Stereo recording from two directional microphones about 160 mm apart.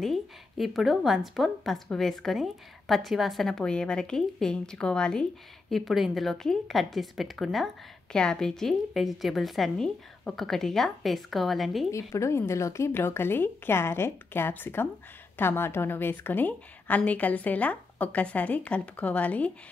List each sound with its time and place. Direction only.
0.0 s a woman's voice: centre (ahead or behind)
11.9 s a woman's voice: 20° left (ahead or behind)